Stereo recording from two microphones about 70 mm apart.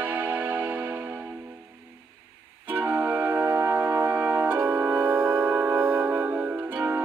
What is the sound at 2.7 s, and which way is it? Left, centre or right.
Music, right.